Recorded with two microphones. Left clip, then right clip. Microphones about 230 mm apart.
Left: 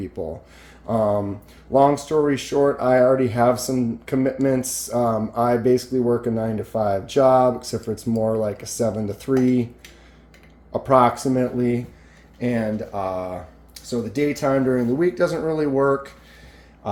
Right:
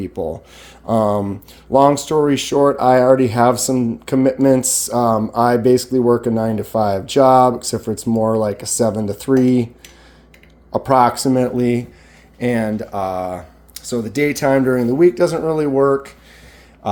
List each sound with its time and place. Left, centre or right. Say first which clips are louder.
0.0 s speech: right 6 dB; right
10.7 s speech: right 3 dB; right